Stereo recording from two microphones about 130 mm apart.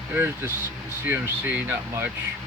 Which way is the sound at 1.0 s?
15° right (ahead or behind).